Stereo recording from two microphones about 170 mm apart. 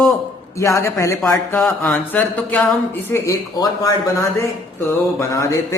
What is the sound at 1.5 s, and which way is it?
A man's voice, 5° left (ahead or behind).